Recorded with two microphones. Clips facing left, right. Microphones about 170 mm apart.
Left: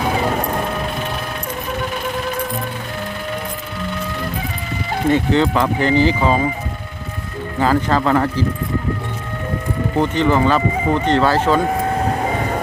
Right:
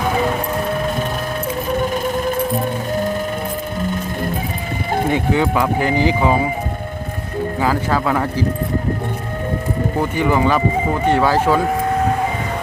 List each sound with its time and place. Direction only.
1.8 s music: 45° right (ahead or behind)
5.0 s speech: 10° right (ahead or behind)
7.6 s speech: 10° right (ahead or behind)
10.0 s speech: 10° right (ahead or behind)